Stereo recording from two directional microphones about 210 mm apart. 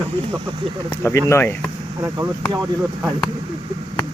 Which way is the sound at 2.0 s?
15° right (ahead or behind).